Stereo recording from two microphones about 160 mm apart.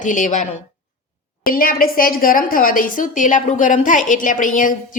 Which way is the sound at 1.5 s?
65° left (ahead or behind).